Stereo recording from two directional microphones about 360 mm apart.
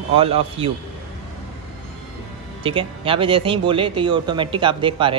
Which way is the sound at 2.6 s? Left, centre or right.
Centre.